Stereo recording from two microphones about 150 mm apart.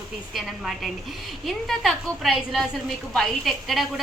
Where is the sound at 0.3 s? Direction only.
Centre (ahead or behind).